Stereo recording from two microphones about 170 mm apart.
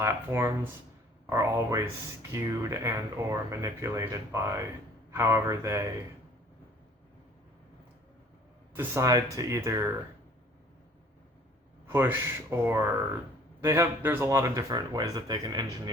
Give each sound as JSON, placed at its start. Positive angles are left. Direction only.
{"t": 0.0, "sound": "speech", "side_deg": -15}
{"t": 8.7, "sound": "speech", "side_deg": -15}
{"t": 11.9, "sound": "speech", "side_deg": -15}